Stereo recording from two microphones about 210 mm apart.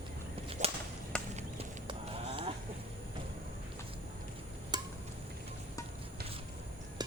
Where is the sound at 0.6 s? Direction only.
35° right (ahead or behind).